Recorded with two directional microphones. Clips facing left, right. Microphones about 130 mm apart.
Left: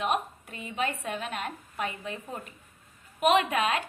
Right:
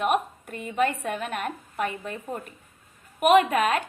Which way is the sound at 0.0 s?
50° right (ahead or behind).